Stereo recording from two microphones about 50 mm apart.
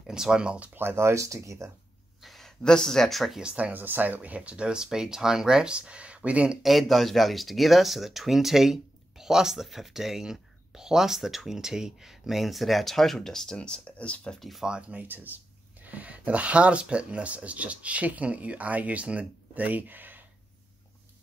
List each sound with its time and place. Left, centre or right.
0.0 s speech: centre
0.7 s speech: right
2.2 s a sound: centre
2.6 s speech: centre
3.5 s speech: right
6.6 s speech: centre
13.6 s speech: left
14.6 s speech: right
15.0 s speech: right